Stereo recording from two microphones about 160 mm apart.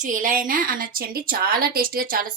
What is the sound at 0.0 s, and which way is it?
A woman's voice, 55° right (ahead or behind).